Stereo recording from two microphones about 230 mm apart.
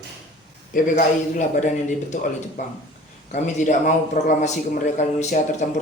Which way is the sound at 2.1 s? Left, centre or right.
Left.